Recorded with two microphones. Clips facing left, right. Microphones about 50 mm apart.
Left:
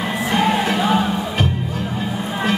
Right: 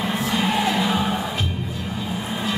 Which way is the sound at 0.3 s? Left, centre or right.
Left.